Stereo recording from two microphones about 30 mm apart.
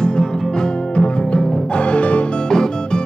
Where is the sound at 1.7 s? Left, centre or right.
Left.